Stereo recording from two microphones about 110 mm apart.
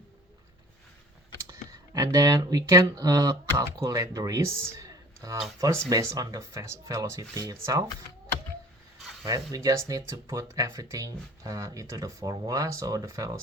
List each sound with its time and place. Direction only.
1.9 s speech: 30° right (ahead or behind)
9.2 s speech: 35° right (ahead or behind)